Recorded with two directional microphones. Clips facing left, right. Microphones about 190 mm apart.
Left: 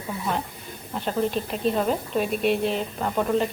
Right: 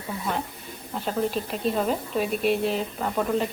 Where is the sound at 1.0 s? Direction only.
Centre (ahead or behind).